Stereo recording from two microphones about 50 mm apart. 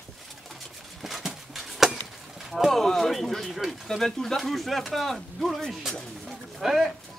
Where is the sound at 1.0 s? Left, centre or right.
Centre.